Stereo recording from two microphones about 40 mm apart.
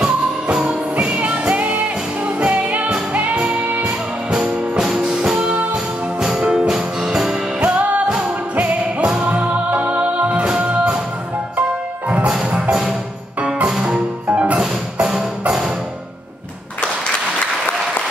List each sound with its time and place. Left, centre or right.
0.0 s music: right
0.7 s music: right
4.3 s music: centre
5.4 s music: right
6.7 s music: centre
7.6 s music: right
10.4 s music: right
10.7 s music: right
14.2 s music: right
15.0 s music: centre